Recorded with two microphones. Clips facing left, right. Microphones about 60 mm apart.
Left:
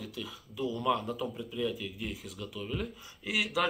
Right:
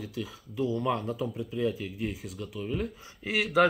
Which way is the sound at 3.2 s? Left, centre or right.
Right.